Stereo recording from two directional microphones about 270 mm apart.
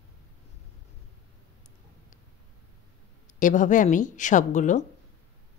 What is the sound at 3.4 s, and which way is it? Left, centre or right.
A woman's voice, left.